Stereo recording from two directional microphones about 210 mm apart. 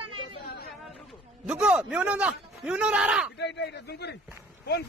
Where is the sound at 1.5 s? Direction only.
5° right (ahead or behind).